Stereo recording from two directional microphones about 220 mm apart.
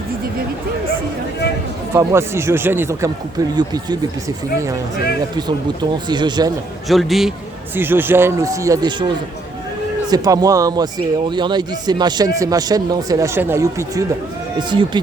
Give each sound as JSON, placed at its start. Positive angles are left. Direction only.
{"t": 1.9, "sound": "speech", "side_deg": -10}
{"t": 5.4, "sound": "speech", "side_deg": -20}
{"t": 6.8, "sound": "a man's voice", "side_deg": 0}